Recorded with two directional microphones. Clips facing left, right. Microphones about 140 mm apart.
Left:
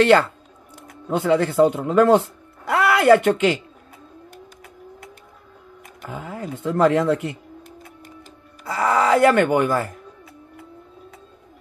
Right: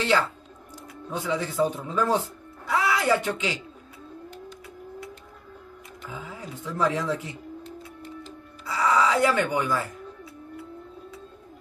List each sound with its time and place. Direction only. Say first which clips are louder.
0.0 s speech: left 9 dB; 60° left (ahead or behind)
6.0 s speech: left 7 dB; 60° left (ahead or behind)
8.0 s music: right 4 dB; 50° left (ahead or behind)